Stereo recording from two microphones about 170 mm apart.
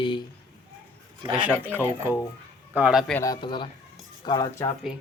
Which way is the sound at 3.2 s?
25° left (ahead or behind).